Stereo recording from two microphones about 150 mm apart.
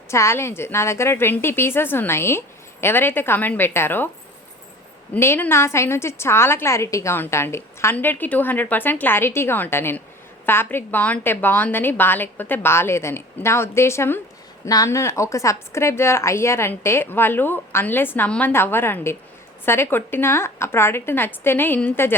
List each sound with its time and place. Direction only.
0.1 s a woman's voice: 20° left (ahead or behind)
5.1 s a woman's voice: 15° left (ahead or behind)